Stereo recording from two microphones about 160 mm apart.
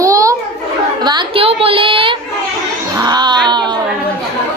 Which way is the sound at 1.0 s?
30° right (ahead or behind).